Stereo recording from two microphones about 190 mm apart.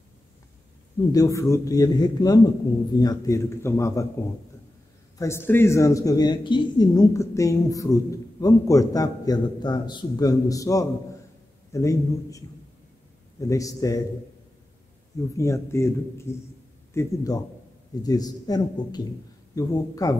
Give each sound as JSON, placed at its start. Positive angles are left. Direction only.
{"t": 1.1, "sound": "a man's voice", "side_deg": 15}
{"t": 5.2, "sound": "speech", "side_deg": 10}
{"t": 15.3, "sound": "a man's voice", "side_deg": 15}